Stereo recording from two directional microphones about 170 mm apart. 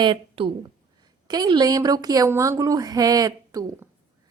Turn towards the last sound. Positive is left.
turn(degrees=-20)  # may be behind; listen again after turning